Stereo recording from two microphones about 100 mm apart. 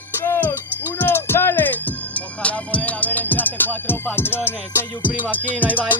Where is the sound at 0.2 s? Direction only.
20° left (ahead or behind).